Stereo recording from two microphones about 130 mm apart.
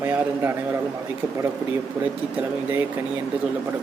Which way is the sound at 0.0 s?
15° right (ahead or behind).